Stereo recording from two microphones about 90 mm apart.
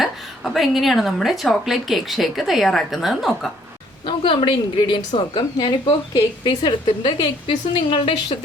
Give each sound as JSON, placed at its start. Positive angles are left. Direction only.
{"t": 0.0, "sound": "a woman's voice", "side_deg": 0}
{"t": 4.0, "sound": "a woman's voice", "side_deg": 65}